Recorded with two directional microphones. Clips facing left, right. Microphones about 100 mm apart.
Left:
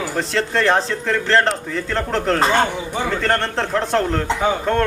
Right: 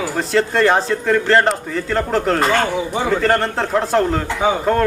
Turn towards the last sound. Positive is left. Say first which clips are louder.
# right 2 dB
turn(degrees=-5)  # may be behind; listen again after turning